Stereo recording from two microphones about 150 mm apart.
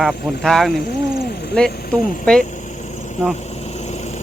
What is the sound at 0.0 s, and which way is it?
Speech, centre (ahead or behind).